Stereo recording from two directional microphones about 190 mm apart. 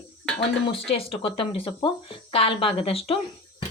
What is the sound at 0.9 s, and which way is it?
Speech, 30° left (ahead or behind).